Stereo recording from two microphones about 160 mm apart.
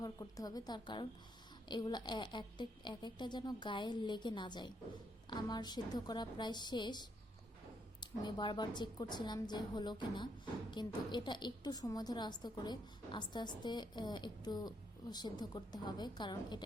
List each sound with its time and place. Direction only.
0.0 s a woman's voice: 20° left (ahead or behind)